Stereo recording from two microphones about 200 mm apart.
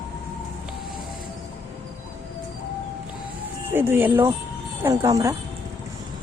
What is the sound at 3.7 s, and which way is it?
Speech, 10° right (ahead or behind).